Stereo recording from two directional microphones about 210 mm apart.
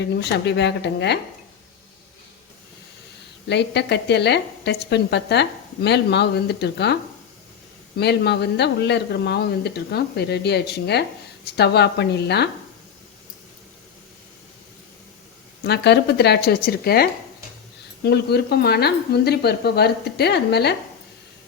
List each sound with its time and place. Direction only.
0.0 s a woman's voice: 55° left (ahead or behind)
3.5 s a woman's voice: 55° left (ahead or behind)
15.6 s a woman's voice: 55° left (ahead or behind)